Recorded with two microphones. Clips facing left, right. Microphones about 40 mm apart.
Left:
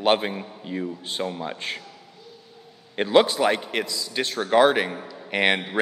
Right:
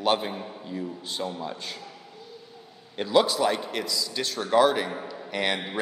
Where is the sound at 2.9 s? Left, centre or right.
Left.